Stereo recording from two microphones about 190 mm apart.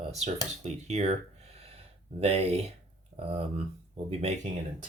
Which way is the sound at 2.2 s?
35° right (ahead or behind).